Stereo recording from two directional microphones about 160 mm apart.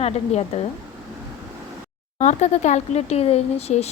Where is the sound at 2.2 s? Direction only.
45° left (ahead or behind).